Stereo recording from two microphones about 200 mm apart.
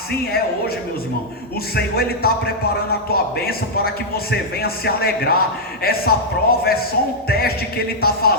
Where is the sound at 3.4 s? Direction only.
50° left (ahead or behind).